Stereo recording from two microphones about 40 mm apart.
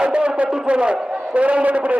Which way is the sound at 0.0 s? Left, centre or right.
Right.